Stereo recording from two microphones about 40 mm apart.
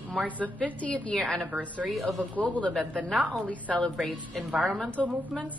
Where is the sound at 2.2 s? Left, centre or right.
Left.